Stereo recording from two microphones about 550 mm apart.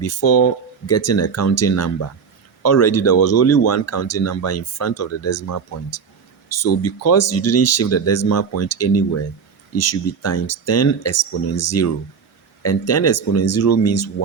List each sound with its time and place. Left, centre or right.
0.0 s speech: left
6.5 s speech: left